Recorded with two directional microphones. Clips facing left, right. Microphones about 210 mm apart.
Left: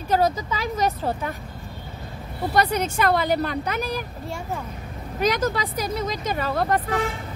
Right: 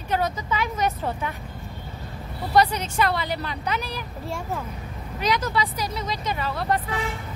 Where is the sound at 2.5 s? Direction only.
50° left (ahead or behind).